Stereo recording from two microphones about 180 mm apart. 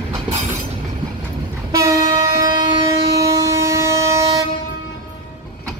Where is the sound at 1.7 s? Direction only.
20° right (ahead or behind).